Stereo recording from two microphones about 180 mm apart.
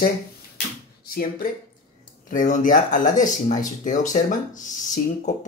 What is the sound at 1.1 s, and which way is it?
Speech, 55° left (ahead or behind).